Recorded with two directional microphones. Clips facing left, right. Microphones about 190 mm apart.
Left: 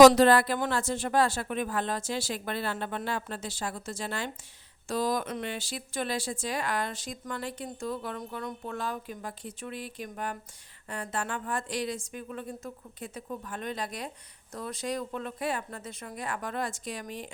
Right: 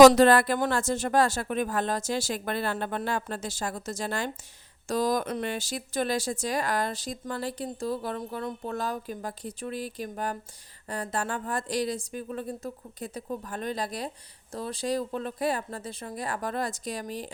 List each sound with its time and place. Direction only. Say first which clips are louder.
0.1 s speech: right 2 dB; 50° right (ahead or behind)